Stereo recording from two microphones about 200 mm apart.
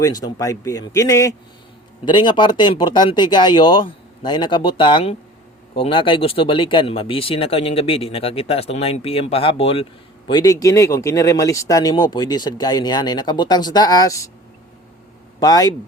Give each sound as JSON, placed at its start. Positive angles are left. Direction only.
{"t": 0.0, "sound": "speech", "side_deg": 20}
{"t": 15.4, "sound": "speech", "side_deg": 20}